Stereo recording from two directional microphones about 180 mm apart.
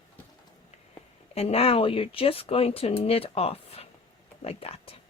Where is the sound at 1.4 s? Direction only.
35° left (ahead or behind).